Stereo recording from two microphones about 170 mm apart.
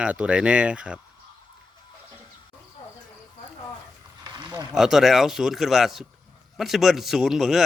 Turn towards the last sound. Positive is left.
turn(degrees=0)  # may be behind; listen again after turning